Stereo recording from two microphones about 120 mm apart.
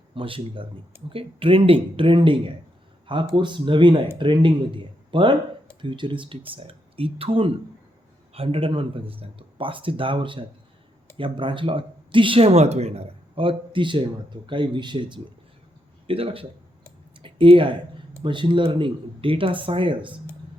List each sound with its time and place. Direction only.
0.1 s speech: 45° right (ahead or behind)
16.0 s speech: 50° right (ahead or behind)